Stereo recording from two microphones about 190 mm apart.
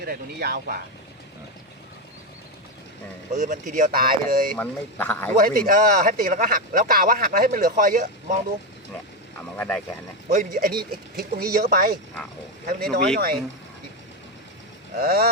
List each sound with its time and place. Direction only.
0.0 s speech: 50° right (ahead or behind)
3.3 s speech: 40° right (ahead or behind)
4.5 s speech: 10° left (ahead or behind)
5.4 s speech: 50° right (ahead or behind)
9.6 s speech: 10° left (ahead or behind)
10.3 s speech: 45° right (ahead or behind)
14.9 s speech: 55° right (ahead or behind)